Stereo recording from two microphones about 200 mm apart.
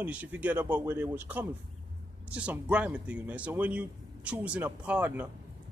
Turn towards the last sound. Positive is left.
turn(degrees=-10)  # may be behind; listen again after turning